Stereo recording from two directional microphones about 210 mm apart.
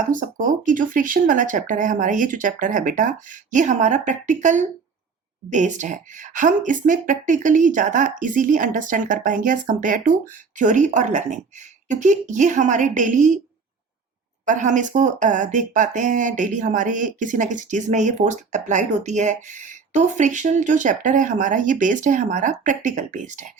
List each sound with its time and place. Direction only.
0.1 s speech: 40° right (ahead or behind)
14.4 s speech: 35° right (ahead or behind)